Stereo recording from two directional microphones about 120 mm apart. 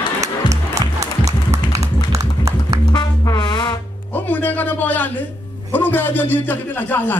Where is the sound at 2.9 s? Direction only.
35° left (ahead or behind).